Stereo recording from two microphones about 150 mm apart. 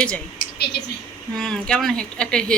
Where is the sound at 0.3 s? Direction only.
90° left.